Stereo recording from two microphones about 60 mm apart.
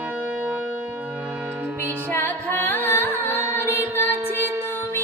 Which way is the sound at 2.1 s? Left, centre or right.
Left.